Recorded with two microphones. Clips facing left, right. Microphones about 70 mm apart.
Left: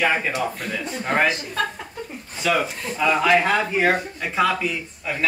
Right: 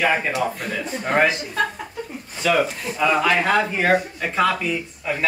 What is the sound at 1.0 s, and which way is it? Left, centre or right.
Speech, centre.